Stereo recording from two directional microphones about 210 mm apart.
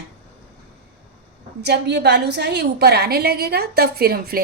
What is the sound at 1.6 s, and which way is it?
A woman's voice, 50° right (ahead or behind).